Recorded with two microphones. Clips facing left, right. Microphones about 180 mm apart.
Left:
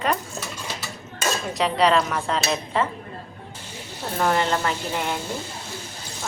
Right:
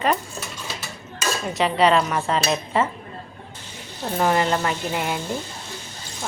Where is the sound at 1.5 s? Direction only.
Centre (ahead or behind).